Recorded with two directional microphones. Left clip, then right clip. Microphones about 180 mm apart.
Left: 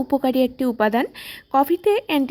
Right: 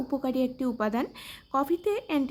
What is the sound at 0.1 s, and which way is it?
A woman's voice, 30° left (ahead or behind).